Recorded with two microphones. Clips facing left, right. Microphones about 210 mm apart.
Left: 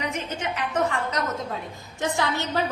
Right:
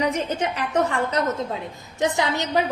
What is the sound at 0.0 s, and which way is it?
A woman's voice, 35° right (ahead or behind).